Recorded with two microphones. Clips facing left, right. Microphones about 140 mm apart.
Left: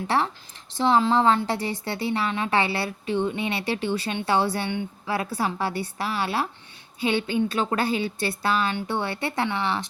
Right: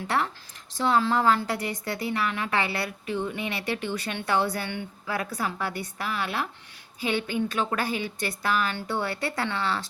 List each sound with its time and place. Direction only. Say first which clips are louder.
0.8 s a woman's voice: left 3 dB; 25° left (ahead or behind)
4.7 s a woman's voice: left 4 dB; 20° left (ahead or behind)
5.1 s a woman's voice: left 4 dB; 30° left (ahead or behind)